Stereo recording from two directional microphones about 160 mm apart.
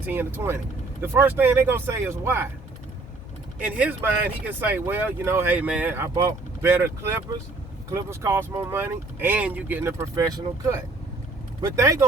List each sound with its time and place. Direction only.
0.0 s speech: 10° right (ahead or behind)
3.6 s speech: 10° right (ahead or behind)